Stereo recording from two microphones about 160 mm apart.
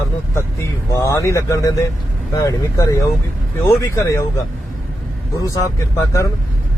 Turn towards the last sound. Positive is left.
turn(degrees=20)  # may be behind; listen again after turning